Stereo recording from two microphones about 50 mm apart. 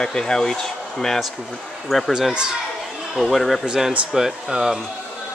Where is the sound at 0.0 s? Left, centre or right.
Centre.